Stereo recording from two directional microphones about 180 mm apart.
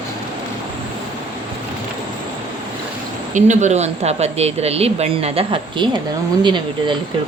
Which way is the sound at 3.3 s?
40° right (ahead or behind).